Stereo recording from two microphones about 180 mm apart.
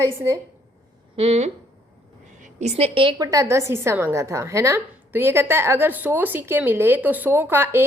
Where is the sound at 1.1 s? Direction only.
35° right (ahead or behind).